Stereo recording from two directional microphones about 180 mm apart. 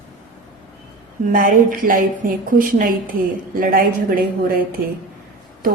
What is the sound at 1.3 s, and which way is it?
A woman's voice, 50° right (ahead or behind).